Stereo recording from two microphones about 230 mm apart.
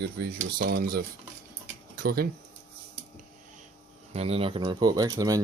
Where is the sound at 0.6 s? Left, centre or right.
Right.